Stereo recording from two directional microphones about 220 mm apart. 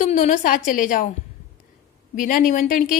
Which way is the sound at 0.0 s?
35° left (ahead or behind).